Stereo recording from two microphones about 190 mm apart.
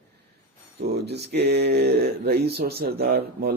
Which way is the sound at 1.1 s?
60° right (ahead or behind).